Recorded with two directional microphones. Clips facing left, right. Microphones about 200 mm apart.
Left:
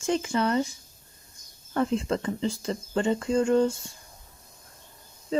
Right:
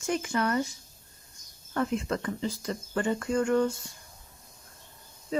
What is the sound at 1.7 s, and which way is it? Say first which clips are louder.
Speech: left 3 dB; 30° left (ahead or behind).